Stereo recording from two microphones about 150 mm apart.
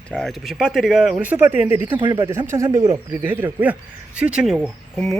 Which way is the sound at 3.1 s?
15° right (ahead or behind).